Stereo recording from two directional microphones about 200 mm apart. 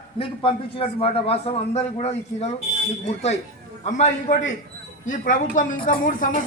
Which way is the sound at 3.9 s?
35° left (ahead or behind).